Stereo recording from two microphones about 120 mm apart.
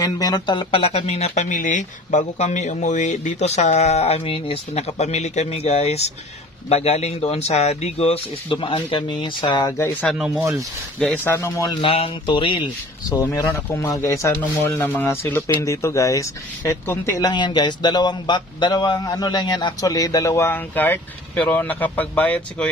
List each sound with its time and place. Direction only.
0.0 s speech: 30° left (ahead or behind); by 4.2 s 60° left (ahead or behind)
4.2 s a man's voice: 50° left (ahead or behind)
9.8 s speech: 20° left (ahead or behind)
10.1 s speech: 5° right (ahead or behind)
11.0 s speech: 10° left (ahead or behind)
11.3 s speech: 25° left (ahead or behind)
11.8 s speech: 50° left (ahead or behind)
13.2 s speech: 25° left (ahead or behind)
14.4 s speech: 15° left (ahead or behind)
17.2 s a man's voice: 40° left (ahead or behind); by 22.7 s 10° left (ahead or behind)